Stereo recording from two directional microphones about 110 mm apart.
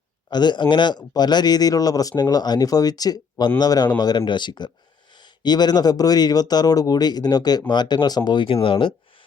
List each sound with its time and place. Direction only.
0.3 s speech: 40° left (ahead or behind)